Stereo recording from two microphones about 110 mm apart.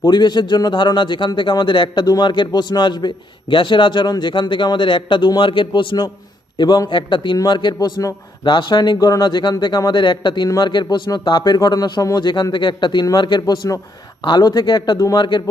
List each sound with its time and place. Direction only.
0.0 s a man's voice: 40° left (ahead or behind)
13.4 s a man's voice: 30° left (ahead or behind)
14.2 s a man's voice: 40° left (ahead or behind)